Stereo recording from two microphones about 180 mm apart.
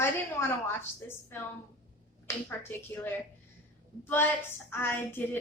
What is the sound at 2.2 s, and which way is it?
A woman's voice, 10° left (ahead or behind).